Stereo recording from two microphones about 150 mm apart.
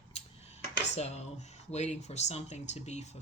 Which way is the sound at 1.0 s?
45° left (ahead or behind).